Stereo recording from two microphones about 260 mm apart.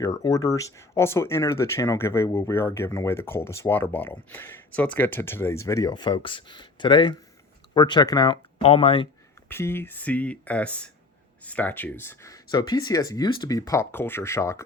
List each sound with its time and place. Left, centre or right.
0.0 s speech: centre
9.5 s speech: centre